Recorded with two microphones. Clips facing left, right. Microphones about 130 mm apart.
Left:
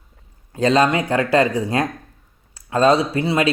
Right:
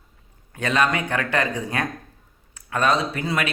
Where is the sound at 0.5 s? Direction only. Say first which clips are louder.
Left 6 dB; 30° left (ahead or behind).